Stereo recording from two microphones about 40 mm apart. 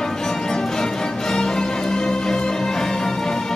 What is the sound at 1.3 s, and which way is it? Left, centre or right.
Music, centre.